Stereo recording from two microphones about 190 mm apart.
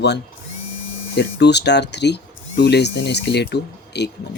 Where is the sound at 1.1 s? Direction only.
65° left (ahead or behind).